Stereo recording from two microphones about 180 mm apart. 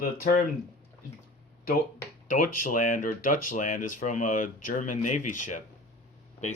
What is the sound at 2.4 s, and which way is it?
Speech, 50° left (ahead or behind).